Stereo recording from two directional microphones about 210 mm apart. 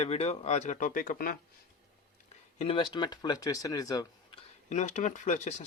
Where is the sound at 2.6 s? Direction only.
25° left (ahead or behind).